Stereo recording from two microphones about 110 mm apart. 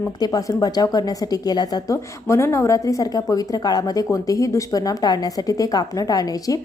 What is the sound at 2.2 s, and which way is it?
A woman's voice, 25° left (ahead or behind).